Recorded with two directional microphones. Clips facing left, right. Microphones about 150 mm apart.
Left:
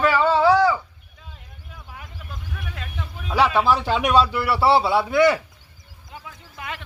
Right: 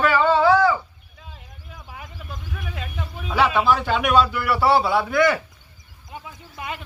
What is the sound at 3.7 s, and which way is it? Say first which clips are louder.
A man's voice: even; 30° left (ahead or behind).